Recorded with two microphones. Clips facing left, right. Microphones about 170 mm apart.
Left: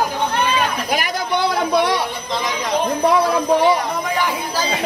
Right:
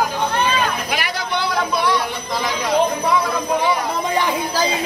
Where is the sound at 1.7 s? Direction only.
65° left (ahead or behind).